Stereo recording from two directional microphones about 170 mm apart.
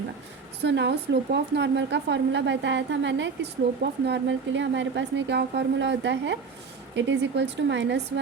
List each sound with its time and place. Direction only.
0.6 s a woman's voice: 90° right